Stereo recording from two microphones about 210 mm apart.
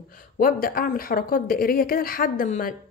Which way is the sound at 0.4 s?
45° left (ahead or behind).